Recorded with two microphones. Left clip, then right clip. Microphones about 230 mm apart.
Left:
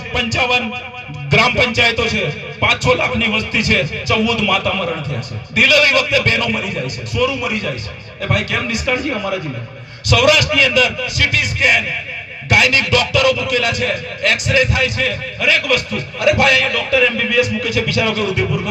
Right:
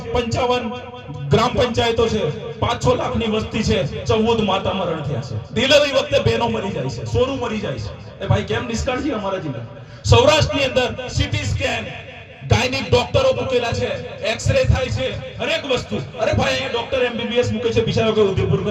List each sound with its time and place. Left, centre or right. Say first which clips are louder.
0.1 s a man's voice: left 3 dB; right
10.1 s a man's voice: left 2 dB; right